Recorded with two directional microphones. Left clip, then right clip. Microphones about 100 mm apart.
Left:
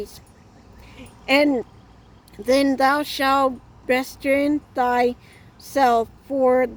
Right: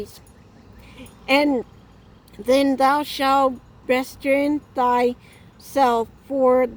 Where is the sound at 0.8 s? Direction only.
40° left (ahead or behind).